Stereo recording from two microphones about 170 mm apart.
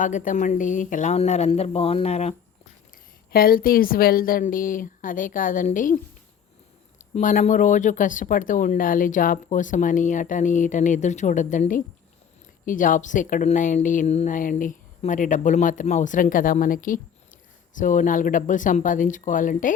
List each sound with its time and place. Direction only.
0.0 s speech: 50° left (ahead or behind)
3.3 s speech: 60° left (ahead or behind)
7.0 s speech: 45° left (ahead or behind)